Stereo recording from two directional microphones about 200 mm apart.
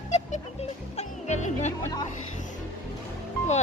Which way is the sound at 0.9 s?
35° left (ahead or behind).